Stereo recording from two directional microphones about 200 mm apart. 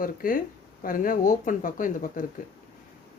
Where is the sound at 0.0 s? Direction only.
45° left (ahead or behind).